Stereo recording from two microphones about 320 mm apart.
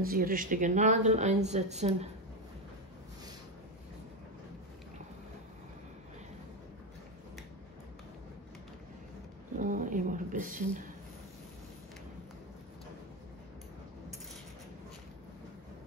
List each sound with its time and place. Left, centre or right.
0.0 s a woman's voice: right
9.6 s a woman's voice: right